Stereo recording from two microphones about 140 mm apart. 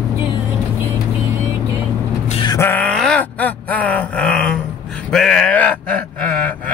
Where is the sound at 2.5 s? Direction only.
15° left (ahead or behind).